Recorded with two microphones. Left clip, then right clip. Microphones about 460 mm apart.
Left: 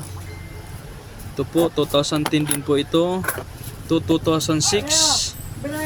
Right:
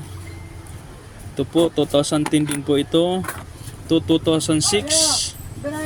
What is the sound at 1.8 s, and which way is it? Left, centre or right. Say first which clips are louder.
Speech: right 1 dB; left.